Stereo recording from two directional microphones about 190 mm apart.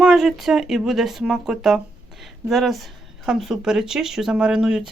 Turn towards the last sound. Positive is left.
turn(degrees=-5)  # may be behind; listen again after turning